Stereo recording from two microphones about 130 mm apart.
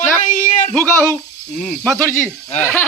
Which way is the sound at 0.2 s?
75° left (ahead or behind).